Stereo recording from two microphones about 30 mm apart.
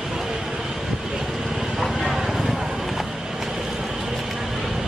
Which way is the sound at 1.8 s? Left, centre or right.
Centre.